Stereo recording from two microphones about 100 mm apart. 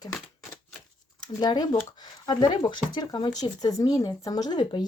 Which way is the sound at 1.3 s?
45° left (ahead or behind).